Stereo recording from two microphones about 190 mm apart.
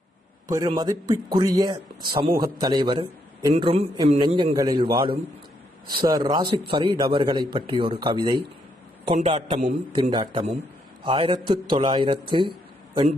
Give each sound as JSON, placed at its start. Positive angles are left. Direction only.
{"t": 0.5, "sound": "a man's voice", "side_deg": -20}
{"t": 9.0, "sound": "a man's voice", "side_deg": -35}